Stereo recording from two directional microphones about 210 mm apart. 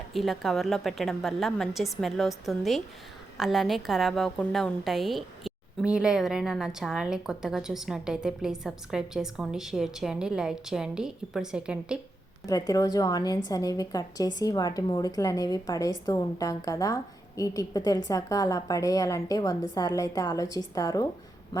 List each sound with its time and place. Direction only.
0.1 s a woman's voice: centre (ahead or behind)
12.5 s a woman's voice: 15° left (ahead or behind)